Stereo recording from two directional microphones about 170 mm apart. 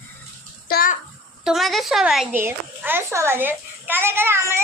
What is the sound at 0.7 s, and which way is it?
Bathtub, 60° left (ahead or behind).